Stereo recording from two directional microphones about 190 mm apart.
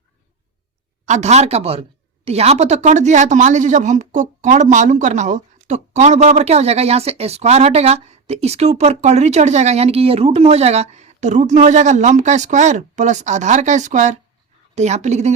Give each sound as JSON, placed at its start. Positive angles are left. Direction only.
{"t": 1.0, "sound": "speech", "side_deg": -40}